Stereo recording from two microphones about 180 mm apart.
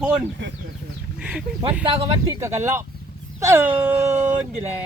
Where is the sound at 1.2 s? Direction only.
5° right (ahead or behind).